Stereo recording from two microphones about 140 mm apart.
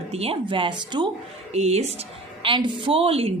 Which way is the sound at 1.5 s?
50° right (ahead or behind).